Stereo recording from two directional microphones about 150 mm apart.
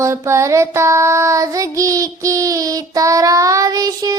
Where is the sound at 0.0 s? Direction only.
20° right (ahead or behind).